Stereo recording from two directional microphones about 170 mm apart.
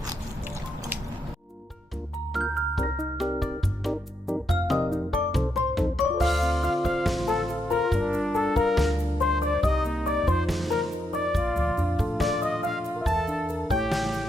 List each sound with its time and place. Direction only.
2.3 s music: centre (ahead or behind)